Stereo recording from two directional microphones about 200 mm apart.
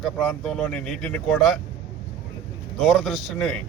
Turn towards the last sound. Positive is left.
turn(degrees=0)  # may be behind; listen again after turning